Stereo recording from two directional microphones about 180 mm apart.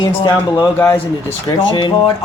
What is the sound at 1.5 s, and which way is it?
Speech, 25° left (ahead or behind).